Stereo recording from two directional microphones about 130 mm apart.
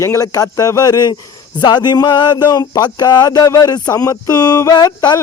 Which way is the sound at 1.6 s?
35° left (ahead or behind).